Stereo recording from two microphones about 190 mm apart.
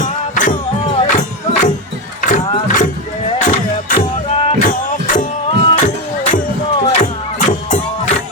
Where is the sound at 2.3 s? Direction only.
45° left (ahead or behind).